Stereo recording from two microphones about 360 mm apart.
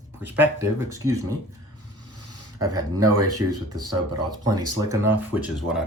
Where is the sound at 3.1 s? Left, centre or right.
Right.